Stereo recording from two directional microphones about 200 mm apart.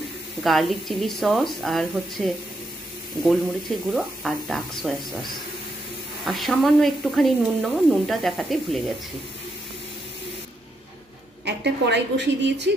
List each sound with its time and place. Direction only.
0.4 s speech: centre (ahead or behind)
6.2 s speech: centre (ahead or behind)
11.4 s a woman's voice: 60° right (ahead or behind)